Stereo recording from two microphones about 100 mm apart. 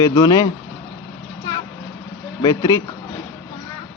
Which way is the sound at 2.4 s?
35° left (ahead or behind).